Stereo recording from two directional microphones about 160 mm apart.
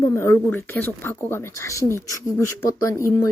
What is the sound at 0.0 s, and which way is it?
A woman's voice, 20° left (ahead or behind).